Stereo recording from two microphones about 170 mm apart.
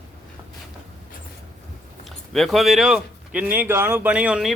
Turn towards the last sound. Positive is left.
turn(degrees=-5)  # may be behind; listen again after turning